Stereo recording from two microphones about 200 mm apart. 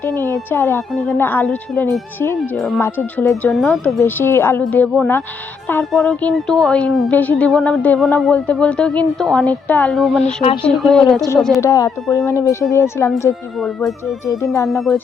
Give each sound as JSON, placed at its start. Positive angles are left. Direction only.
{"t": 0.3, "sound": "speech", "side_deg": 10}
{"t": 11.6, "sound": "speech", "side_deg": 15}
{"t": 14.7, "sound": "speech", "side_deg": 0}